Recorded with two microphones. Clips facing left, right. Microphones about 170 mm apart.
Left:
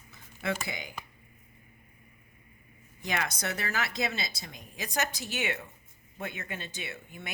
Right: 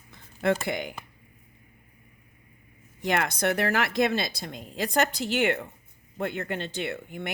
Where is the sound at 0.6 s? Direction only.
60° right (ahead or behind).